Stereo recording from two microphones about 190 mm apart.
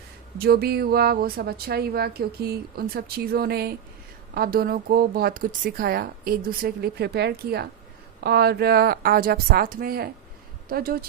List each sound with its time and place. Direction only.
0.3 s a woman's voice: 55° right (ahead or behind)